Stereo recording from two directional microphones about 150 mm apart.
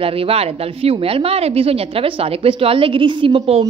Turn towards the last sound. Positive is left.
turn(degrees=-40)  # may be behind; listen again after turning